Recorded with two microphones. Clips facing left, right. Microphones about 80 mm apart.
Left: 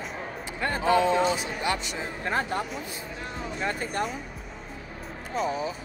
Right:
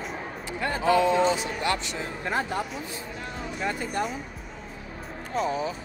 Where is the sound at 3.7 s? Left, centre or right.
Left.